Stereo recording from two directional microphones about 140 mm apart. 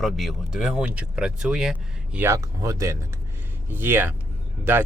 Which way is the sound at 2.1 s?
20° right (ahead or behind).